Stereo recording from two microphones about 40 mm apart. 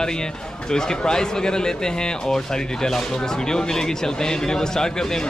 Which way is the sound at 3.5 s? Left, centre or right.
Centre.